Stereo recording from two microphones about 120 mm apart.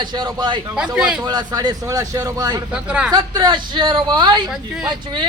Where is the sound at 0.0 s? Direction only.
35° right (ahead or behind).